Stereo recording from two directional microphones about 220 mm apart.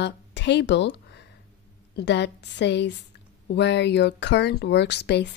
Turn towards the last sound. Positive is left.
turn(degrees=50)  # may be behind; listen again after turning